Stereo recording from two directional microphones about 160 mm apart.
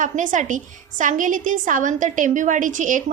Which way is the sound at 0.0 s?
55° right (ahead or behind).